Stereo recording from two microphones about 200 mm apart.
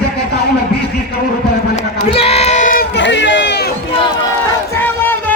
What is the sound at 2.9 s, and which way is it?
Run, 60° left (ahead or behind).